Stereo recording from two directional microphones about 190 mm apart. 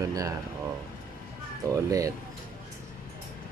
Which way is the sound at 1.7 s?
15° right (ahead or behind).